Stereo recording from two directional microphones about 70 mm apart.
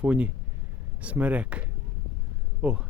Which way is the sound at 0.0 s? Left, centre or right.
Centre.